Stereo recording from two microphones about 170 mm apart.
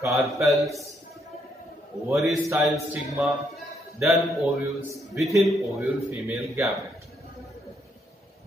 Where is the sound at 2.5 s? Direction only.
5° right (ahead or behind).